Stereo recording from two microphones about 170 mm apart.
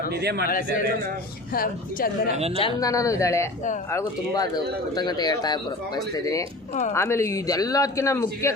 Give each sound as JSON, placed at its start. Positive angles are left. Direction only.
{"t": 0.1, "sound": "a man's voice", "side_deg": -70}
{"t": 1.5, "sound": "a woman's voice", "side_deg": 60}
{"t": 2.6, "sound": "speech", "side_deg": 30}
{"t": 2.9, "sound": "a man's voice", "side_deg": 20}